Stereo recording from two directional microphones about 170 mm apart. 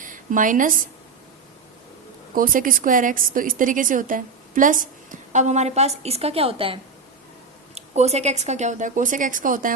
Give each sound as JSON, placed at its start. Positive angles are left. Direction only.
{"t": 0.0, "sound": "a woman's voice", "side_deg": -50}
{"t": 2.3, "sound": "a woman's voice", "side_deg": -55}
{"t": 7.8, "sound": "a woman's voice", "side_deg": -40}